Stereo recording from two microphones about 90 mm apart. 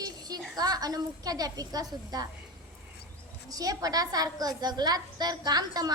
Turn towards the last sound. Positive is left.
turn(degrees=-45)  # may be behind; listen again after turning